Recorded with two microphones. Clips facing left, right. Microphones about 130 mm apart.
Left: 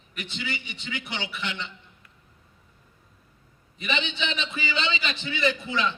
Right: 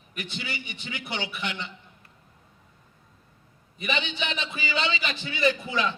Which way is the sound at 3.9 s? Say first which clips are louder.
Even; 20° left (ahead or behind).